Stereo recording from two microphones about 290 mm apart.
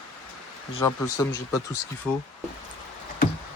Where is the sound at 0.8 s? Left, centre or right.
Centre.